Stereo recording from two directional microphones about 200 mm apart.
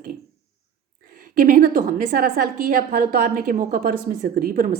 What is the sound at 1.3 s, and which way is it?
A woman's voice, 40° right (ahead or behind).